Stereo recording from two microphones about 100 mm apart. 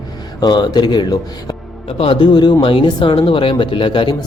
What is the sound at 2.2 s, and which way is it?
Speech, 50° left (ahead or behind).